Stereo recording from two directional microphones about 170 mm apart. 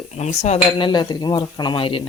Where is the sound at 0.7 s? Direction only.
30° left (ahead or behind).